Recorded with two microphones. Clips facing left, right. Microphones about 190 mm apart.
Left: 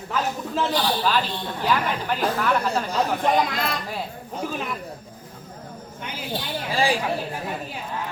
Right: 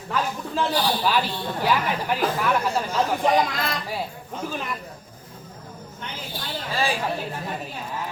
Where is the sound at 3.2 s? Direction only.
Centre (ahead or behind).